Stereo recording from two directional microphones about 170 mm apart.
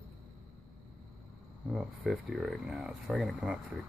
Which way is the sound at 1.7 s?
Centre (ahead or behind).